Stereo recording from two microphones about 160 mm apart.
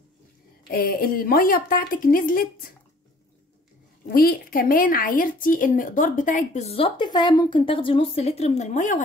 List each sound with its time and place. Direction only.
0.7 s a woman's voice: 65° left (ahead or behind)
4.1 s a woman's voice: 65° left (ahead or behind); by 9.0 s 50° left (ahead or behind)